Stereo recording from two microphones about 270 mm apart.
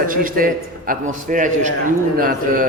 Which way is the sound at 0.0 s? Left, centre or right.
Right.